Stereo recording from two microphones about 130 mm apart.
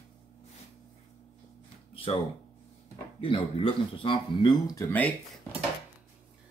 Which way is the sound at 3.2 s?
40° left (ahead or behind).